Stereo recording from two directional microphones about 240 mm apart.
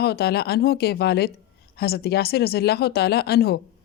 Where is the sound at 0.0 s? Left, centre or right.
Left.